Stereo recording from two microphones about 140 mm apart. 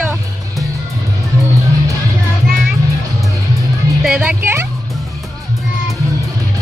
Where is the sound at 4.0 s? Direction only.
5° right (ahead or behind).